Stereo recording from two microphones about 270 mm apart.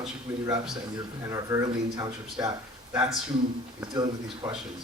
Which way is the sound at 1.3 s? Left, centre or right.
Centre.